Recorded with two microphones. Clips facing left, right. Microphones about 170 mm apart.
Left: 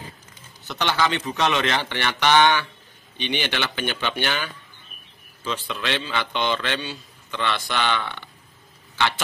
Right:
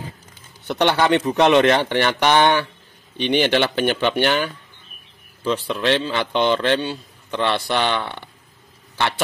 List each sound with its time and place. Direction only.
0.7 s a man's voice: 60° right (ahead or behind)